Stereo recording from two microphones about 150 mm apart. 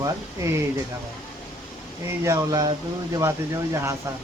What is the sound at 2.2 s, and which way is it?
Speech, 25° right (ahead or behind).